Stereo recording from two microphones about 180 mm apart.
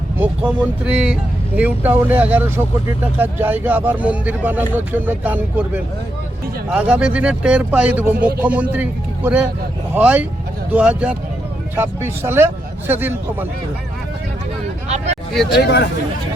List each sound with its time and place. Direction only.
0.2 s speech: 10° right (ahead or behind)
14.8 s a sound: 40° right (ahead or behind)
15.3 s speech: centre (ahead or behind)
15.5 s speech: 65° left (ahead or behind)